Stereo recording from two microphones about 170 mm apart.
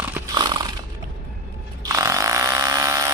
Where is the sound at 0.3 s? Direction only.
25° right (ahead or behind).